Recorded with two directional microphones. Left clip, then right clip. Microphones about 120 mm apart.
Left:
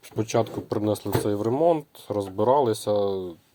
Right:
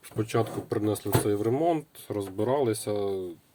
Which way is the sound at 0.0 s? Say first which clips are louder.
Left 4 dB; 40° left (ahead or behind).